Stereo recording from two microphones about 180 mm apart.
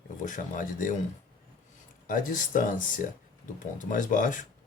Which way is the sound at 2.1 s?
45° left (ahead or behind).